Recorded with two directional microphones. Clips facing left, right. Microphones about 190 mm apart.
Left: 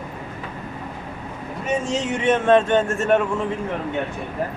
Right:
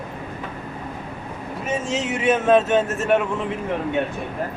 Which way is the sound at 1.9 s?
5° right (ahead or behind).